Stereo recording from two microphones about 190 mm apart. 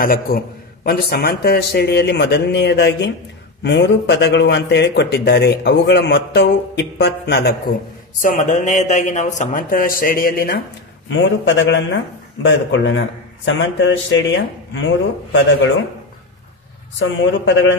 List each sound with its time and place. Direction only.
0.0 s a man's voice: 50° left (ahead or behind)
8.2 s speech: 45° left (ahead or behind)
11.1 s speech: 75° left (ahead or behind)
17.0 s speech: 70° left (ahead or behind)